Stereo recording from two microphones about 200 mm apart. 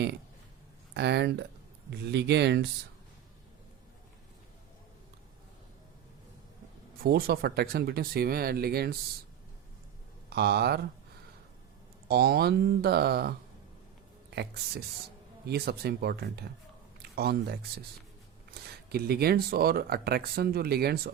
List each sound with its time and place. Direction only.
0.9 s speech: 60° right (ahead or behind)
7.0 s speech: 50° right (ahead or behind)
10.2 s speech: 55° right (ahead or behind)
12.0 s speech: 50° right (ahead or behind)
18.9 s speech: 50° right (ahead or behind)